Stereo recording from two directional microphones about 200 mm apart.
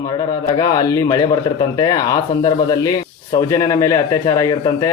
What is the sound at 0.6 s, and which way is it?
Speech, 20° left (ahead or behind).